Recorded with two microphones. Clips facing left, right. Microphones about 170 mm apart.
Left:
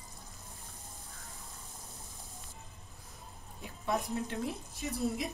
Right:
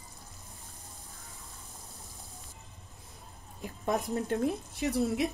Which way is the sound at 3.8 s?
50° right (ahead or behind).